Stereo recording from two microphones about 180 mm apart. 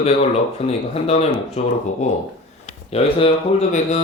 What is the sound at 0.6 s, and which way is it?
Speech, 35° left (ahead or behind).